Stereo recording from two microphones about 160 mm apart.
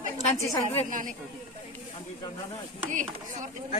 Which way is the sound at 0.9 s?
55° right (ahead or behind).